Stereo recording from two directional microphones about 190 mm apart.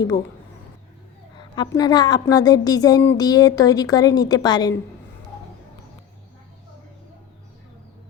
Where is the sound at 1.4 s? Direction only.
20° left (ahead or behind).